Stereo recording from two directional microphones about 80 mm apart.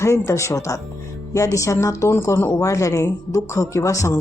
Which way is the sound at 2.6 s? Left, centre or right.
Left.